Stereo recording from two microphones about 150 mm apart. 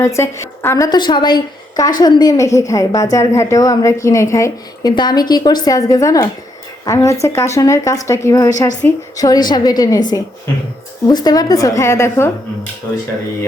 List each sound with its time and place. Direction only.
0.0 s a woman's voice: 20° left (ahead or behind)
0.9 s a woman's voice: 30° left (ahead or behind)
11.1 s a woman's voice: 25° left (ahead or behind)